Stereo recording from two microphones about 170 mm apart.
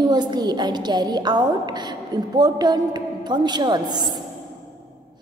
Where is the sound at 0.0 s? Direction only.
25° right (ahead or behind).